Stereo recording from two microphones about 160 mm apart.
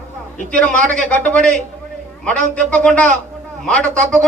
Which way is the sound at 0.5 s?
5° left (ahead or behind).